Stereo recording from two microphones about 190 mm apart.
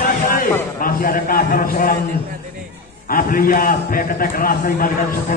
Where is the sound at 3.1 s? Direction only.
50° left (ahead or behind).